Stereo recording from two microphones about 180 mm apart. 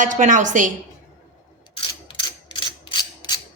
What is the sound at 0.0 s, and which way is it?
Speech, 45° right (ahead or behind).